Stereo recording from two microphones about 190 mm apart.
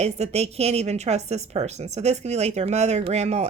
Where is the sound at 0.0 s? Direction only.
35° right (ahead or behind).